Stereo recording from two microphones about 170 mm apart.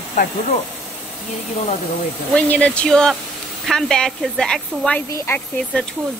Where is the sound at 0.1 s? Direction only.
50° left (ahead or behind).